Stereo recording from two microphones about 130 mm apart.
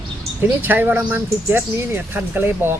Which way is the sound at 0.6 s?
15° right (ahead or behind).